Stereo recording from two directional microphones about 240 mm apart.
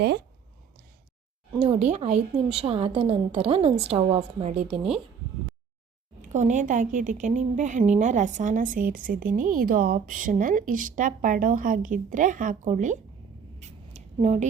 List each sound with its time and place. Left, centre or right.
1.5 s a woman's voice: right
6.2 s a woman's voice: right
13.6 s a sound: right